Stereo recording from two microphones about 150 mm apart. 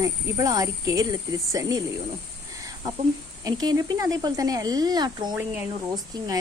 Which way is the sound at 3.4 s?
25° right (ahead or behind).